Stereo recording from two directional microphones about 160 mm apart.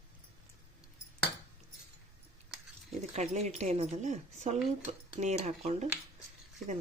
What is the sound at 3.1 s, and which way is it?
Speech, 45° right (ahead or behind).